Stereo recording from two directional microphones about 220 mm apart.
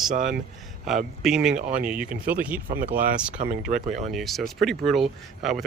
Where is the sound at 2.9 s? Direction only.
40° right (ahead or behind).